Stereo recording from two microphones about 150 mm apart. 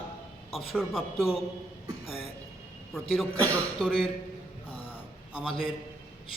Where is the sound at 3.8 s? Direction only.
5° right (ahead or behind).